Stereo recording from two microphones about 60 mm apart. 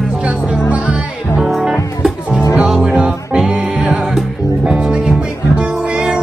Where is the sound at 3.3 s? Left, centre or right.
Centre.